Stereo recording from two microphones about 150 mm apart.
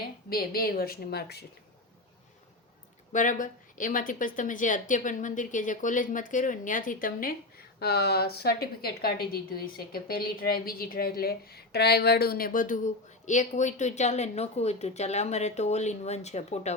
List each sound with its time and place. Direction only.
0.3 s a woman's voice: 80° left
3.1 s a woman's voice: 60° left (ahead or behind)
7.8 s a woman's voice: 90° left; by 16.7 s 50° left (ahead or behind)